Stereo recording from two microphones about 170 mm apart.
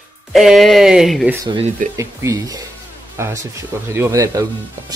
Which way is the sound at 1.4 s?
35° right (ahead or behind).